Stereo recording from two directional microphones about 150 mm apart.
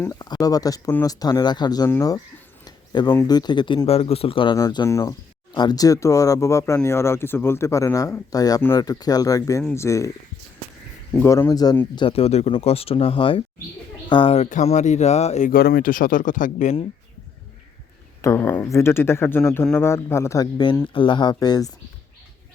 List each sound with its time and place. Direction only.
0.0 s speech: 25° left (ahead or behind)
2.6 s a sound: 30° left (ahead or behind)
3.2 s speech: 25° left (ahead or behind)
4.5 s speech: 25° left (ahead or behind)
11.2 s speech: 20° left (ahead or behind)
11.9 s speech: 40° left (ahead or behind)
14.5 s speech: 50° left (ahead or behind)
15.5 s speech: 80° left; by 16.7 s 60° left (ahead or behind)
18.2 s speech: 20° left (ahead or behind)